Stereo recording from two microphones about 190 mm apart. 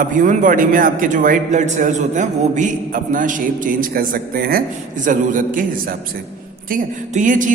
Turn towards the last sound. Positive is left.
turn(degrees=-40)  # may be behind; listen again after turning